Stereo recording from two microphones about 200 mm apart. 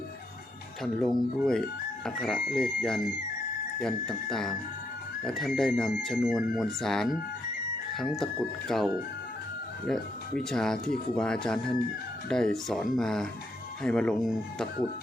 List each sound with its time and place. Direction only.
0.8 s speech: centre (ahead or behind)